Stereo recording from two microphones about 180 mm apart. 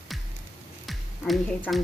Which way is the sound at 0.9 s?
Centre (ahead or behind).